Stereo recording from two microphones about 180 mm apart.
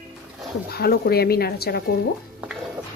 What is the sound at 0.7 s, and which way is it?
Speech, 60° left (ahead or behind).